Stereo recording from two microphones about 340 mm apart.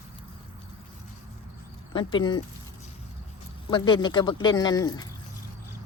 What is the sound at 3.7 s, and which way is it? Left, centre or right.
Speech, centre.